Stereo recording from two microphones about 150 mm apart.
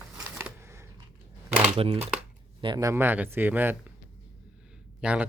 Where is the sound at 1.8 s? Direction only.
45° right (ahead or behind).